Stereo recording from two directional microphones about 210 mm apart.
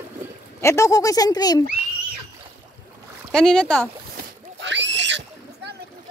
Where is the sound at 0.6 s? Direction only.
15° left (ahead or behind).